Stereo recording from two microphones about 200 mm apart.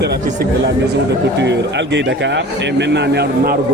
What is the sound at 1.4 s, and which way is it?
Speech, 60° right (ahead or behind).